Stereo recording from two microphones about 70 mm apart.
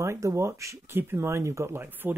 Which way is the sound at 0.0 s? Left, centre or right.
Right.